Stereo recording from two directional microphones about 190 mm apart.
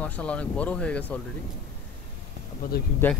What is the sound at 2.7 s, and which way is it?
Speech, 55° left (ahead or behind).